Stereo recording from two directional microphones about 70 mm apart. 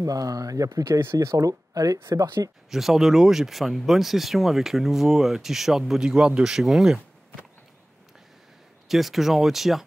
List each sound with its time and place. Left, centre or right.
0.0 s speech: right
2.7 s speech: centre
8.8 s speech: centre